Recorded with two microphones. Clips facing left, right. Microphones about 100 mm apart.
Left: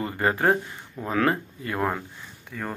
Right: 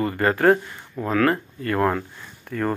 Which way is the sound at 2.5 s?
75° right (ahead or behind).